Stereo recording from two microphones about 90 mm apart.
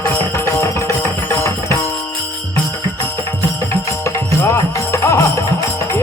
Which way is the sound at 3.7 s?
30° left (ahead or behind).